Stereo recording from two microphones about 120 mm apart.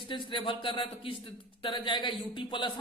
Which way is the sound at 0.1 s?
45° left (ahead or behind).